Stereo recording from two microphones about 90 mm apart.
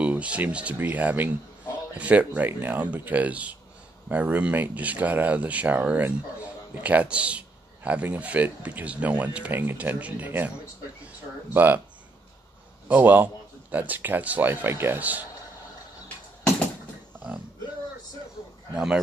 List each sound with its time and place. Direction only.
0.0 s speech: 15° right (ahead or behind)
11.5 s a man's voice: 20° right (ahead or behind)
12.8 s a man's voice: 20° right (ahead or behind)